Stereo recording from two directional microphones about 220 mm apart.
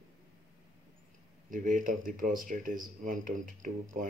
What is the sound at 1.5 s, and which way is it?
Speech, 35° right (ahead or behind).